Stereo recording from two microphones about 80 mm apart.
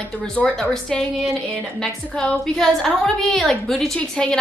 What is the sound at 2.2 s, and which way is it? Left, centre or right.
A woman's voice, centre.